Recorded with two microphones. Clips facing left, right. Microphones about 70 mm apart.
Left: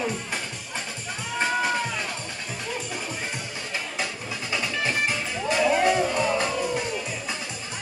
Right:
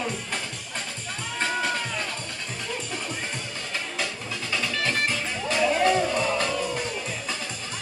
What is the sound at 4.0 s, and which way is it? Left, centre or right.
Music, centre.